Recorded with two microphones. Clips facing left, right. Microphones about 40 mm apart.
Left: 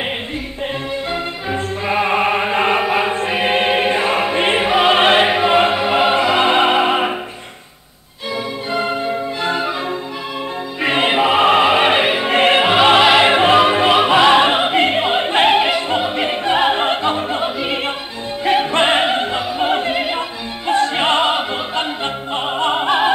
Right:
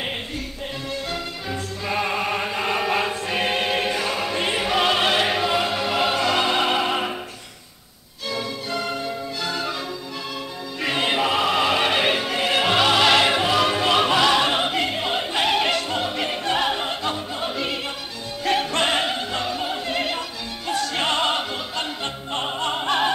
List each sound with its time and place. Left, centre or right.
1.1 s music: left
2.8 s chant: left
3.3 s choir: left
8.7 s music: left
10.8 s music: left
15.6 s opera: left
18.4 s music: left
19.6 s opera: left
20.0 s opera: left